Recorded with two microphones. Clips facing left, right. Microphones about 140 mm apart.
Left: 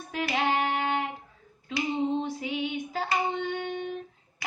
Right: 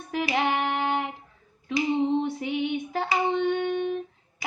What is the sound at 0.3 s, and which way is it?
Music, 60° right (ahead or behind).